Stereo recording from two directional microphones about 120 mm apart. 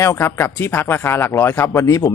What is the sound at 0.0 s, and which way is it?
Speech, 20° left (ahead or behind).